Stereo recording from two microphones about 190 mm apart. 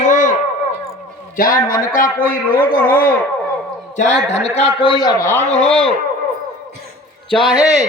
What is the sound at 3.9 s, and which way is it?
A man's voice, 35° left (ahead or behind).